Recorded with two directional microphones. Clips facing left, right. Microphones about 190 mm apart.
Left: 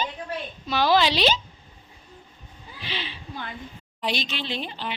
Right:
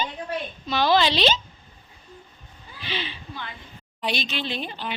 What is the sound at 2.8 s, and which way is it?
Speech, centre (ahead or behind).